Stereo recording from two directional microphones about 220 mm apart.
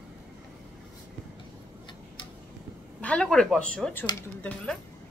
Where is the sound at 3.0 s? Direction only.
5° left (ahead or behind).